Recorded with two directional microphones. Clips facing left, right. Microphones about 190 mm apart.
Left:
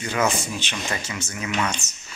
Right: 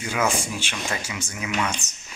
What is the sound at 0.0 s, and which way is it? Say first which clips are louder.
Speech: left 1 dB; 10° right (ahead or behind).